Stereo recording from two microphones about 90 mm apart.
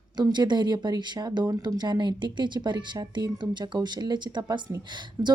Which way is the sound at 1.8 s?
55° right (ahead or behind).